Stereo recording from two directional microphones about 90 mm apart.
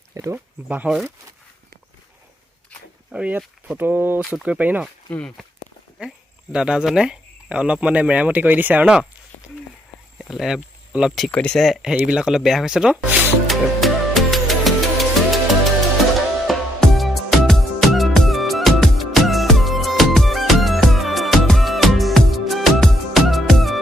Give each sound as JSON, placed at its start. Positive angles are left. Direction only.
{"t": 0.1, "sound": "speech", "side_deg": -35}
{"t": 3.1, "sound": "speech", "side_deg": -15}
{"t": 5.1, "sound": "speech", "side_deg": 15}
{"t": 6.0, "sound": "speech", "side_deg": -10}
{"t": 10.2, "sound": "speech", "side_deg": 0}
{"t": 11.3, "sound": "speech", "side_deg": 10}
{"t": 13.5, "sound": "music", "side_deg": 0}
{"t": 16.5, "sound": "music", "side_deg": 0}